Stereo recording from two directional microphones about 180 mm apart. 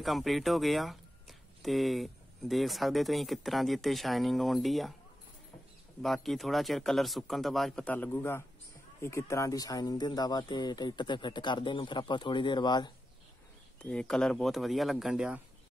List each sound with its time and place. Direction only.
0.0 s speech: centre (ahead or behind)
6.0 s speech: centre (ahead or behind); by 12.9 s 25° left (ahead or behind)
13.8 s speech: 5° left (ahead or behind)